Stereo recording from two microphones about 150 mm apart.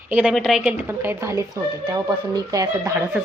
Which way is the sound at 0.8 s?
15° right (ahead or behind).